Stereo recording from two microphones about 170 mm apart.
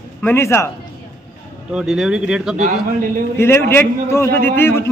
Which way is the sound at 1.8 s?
5° right (ahead or behind).